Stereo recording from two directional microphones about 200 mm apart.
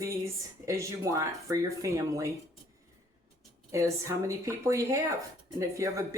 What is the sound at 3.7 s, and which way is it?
A woman's voice, 15° right (ahead or behind).